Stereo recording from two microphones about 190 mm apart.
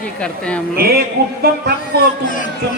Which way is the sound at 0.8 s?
55° right (ahead or behind).